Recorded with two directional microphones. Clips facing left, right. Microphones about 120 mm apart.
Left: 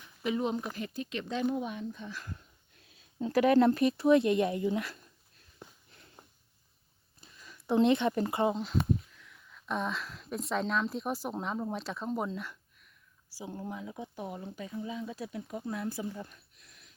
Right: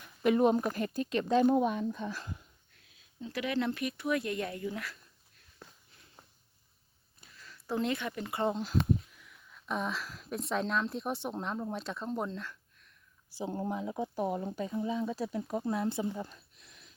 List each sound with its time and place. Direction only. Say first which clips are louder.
0.0 s speech: right 6 dB; 55° right (ahead or behind)
3.2 s speech: left 9 dB; 45° left (ahead or behind); by 4.9 s 25° left (ahead or behind)
5.6 s a sound: left 3 dB; 20° left (ahead or behind)
7.3 s a sound: left 7 dB; 15° left (ahead or behind)
8.4 s speech: even; centre (ahead or behind)
13.5 s speech: right 4 dB; 35° right (ahead or behind)
15.4 s speech: right 5 dB; 50° right (ahead or behind)
15.7 s speech: right 2 dB; 25° right (ahead or behind)